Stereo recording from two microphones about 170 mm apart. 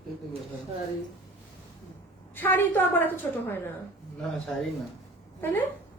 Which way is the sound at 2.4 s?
10° left (ahead or behind).